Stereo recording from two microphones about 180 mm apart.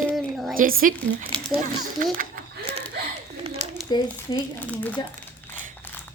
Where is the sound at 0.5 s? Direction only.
50° right (ahead or behind).